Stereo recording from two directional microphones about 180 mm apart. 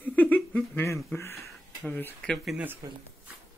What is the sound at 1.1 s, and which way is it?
Speech, 15° left (ahead or behind).